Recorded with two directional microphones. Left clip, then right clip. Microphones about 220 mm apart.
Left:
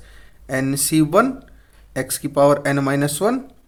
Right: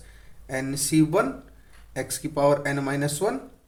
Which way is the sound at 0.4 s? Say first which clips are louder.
Left 7 dB; 40° left (ahead or behind).